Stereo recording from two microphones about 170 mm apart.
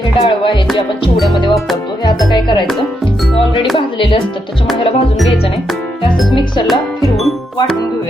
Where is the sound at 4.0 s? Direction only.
30° left (ahead or behind).